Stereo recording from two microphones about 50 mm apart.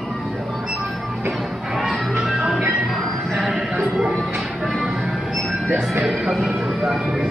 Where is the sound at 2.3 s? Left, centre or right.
Centre.